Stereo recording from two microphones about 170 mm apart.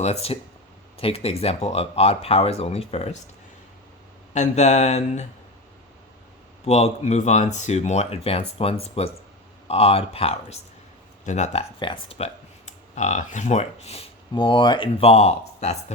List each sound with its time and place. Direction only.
0.0 s speech: 40° left (ahead or behind)
4.4 s speech: 40° left (ahead or behind)
6.7 s speech: 40° left (ahead or behind)
11.8 s speech: 30° left (ahead or behind)